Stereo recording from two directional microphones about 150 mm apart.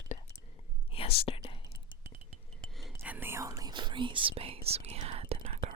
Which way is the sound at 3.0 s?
15° right (ahead or behind).